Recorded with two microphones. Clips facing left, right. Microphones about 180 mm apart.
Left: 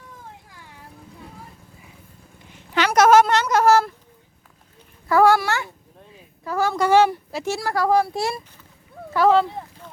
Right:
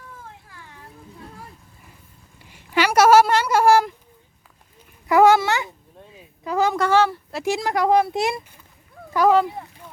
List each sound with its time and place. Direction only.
2.7 s speech: 10° right (ahead or behind)
5.0 s a woman's voice: 20° right (ahead or behind)
6.9 s speech: 15° left (ahead or behind)
7.4 s speech: 15° right (ahead or behind)